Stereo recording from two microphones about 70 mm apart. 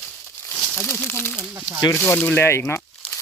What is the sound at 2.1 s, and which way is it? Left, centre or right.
Speech, left.